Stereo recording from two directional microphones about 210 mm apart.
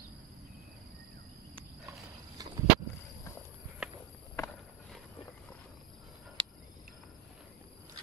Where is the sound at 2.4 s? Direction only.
15° right (ahead or behind).